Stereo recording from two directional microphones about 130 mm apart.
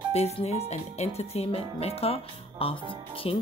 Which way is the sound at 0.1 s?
55° left (ahead or behind).